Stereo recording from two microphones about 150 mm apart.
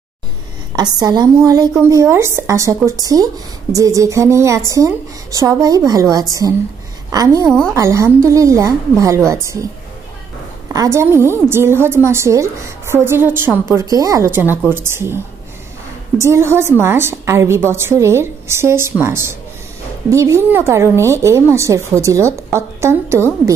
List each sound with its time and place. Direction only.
0.7 s a woman's voice: 25° right (ahead or behind)
7.4 s a woman's voice: 5° left (ahead or behind)
7.7 s a woman's voice: 20° right (ahead or behind)
10.7 s a woman's voice: 20° right (ahead or behind)
16.2 s a woman's voice: 20° right (ahead or behind)